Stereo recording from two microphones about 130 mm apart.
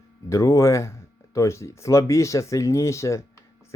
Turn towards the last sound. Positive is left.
turn(degrees=20)  # may be behind; listen again after turning